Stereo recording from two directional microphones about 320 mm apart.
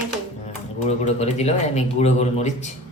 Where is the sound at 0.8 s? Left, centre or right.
Left.